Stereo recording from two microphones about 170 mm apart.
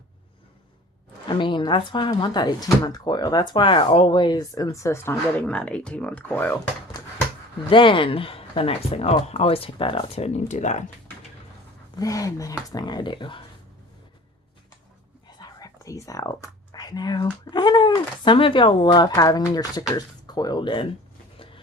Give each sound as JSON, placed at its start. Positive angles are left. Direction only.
{"t": 1.3, "sound": "speech", "side_deg": 30}
{"t": 7.7, "sound": "speech", "side_deg": 30}
{"t": 11.9, "sound": "speech", "side_deg": 20}
{"t": 15.4, "sound": "speech", "side_deg": 20}